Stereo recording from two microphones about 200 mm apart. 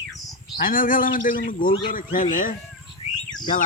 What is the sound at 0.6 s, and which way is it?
Speech, 45° left (ahead or behind).